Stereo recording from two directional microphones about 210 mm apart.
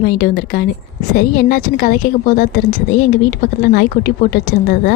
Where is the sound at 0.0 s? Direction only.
45° left (ahead or behind).